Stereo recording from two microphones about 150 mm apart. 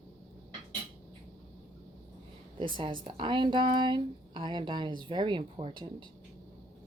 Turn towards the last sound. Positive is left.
turn(degrees=-30)  # may be behind; listen again after turning